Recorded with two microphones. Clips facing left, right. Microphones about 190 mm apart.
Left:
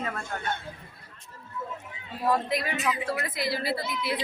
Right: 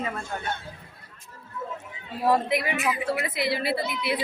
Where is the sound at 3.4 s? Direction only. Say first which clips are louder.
Right 3 dB; 60° right (ahead or behind).